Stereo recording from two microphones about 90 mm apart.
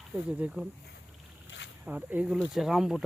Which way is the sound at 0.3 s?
15° right (ahead or behind).